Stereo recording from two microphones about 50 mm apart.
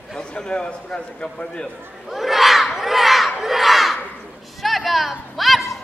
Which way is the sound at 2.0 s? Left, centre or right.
Centre.